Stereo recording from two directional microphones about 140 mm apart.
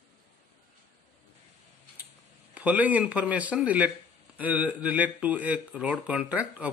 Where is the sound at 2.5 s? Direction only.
10° right (ahead or behind).